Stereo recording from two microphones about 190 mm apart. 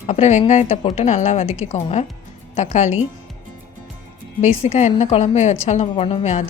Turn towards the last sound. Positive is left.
turn(degrees=35)  # may be behind; listen again after turning